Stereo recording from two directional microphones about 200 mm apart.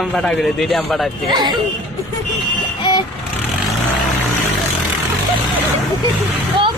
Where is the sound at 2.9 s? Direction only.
20° left (ahead or behind).